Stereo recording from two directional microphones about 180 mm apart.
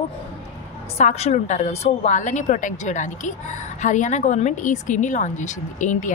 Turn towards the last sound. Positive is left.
turn(degrees=45)  # may be behind; listen again after turning